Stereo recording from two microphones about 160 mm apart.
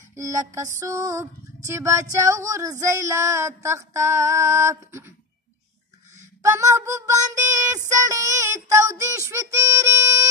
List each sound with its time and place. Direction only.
0.1 s child singing: 20° right (ahead or behind)
2.2 s female singing: 20° right (ahead or behind)
6.4 s child singing: 20° right (ahead or behind)
7.9 s female singing: 20° right (ahead or behind)